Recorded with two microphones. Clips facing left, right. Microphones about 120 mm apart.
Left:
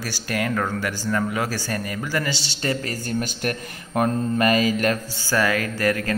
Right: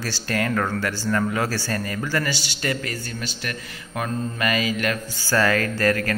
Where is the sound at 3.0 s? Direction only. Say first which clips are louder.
Left 6 dB; 50° left (ahead or behind).